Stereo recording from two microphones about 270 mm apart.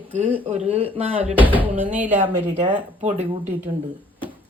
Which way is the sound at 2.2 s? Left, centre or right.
Right.